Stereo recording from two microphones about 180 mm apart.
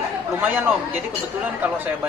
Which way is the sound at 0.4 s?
10° right (ahead or behind).